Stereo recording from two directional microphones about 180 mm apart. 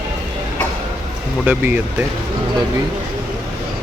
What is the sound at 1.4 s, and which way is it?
Speech, 10° right (ahead or behind).